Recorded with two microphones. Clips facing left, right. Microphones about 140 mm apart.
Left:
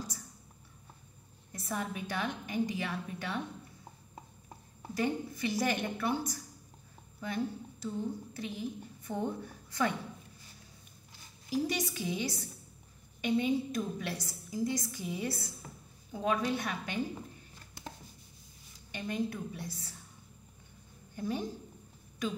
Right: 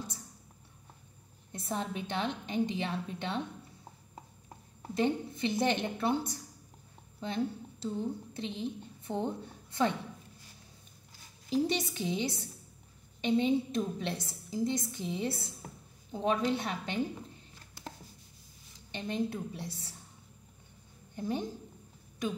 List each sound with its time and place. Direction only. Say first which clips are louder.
1.5 s a woman's voice: right 1 dB; 25° right (ahead or behind)
4.9 s a woman's voice: right 3 dB; 25° right (ahead or behind)
11.5 s a woman's voice: right 2 dB; 25° right (ahead or behind)
18.9 s a woman's voice: right 1 dB; 25° right (ahead or behind)
21.1 s a woman's voice: right 1 dB; 20° right (ahead or behind)